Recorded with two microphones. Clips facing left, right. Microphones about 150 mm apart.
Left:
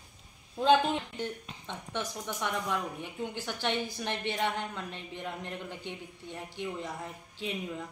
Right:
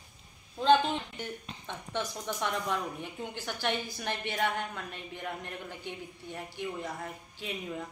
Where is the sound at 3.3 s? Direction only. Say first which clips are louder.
Right 1 dB; 20° left (ahead or behind).